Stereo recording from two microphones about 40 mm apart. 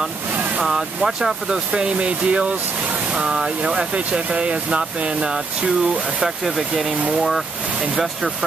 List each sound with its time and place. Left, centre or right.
0.6 s speech: centre; by 2.5 s right
3.2 s speech: centre
6.2 s speech: centre